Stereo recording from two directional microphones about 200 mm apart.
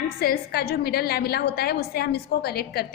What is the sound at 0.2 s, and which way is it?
A woman's voice, 50° left (ahead or behind).